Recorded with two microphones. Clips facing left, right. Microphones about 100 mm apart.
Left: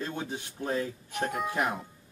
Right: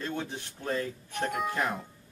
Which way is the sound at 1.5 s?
15° left (ahead or behind).